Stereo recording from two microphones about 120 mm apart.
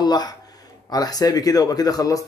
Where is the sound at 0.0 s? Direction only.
35° left (ahead or behind).